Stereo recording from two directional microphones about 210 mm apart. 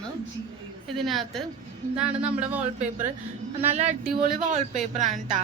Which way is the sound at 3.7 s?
30° right (ahead or behind).